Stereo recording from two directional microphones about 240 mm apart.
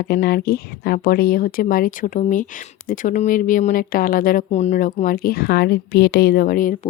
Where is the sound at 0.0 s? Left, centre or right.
Left.